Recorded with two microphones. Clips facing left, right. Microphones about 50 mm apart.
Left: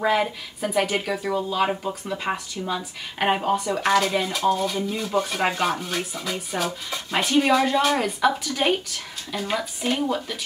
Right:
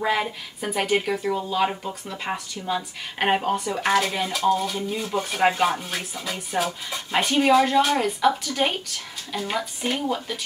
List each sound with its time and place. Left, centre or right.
0.0 s speech: centre
2.7 s speech: centre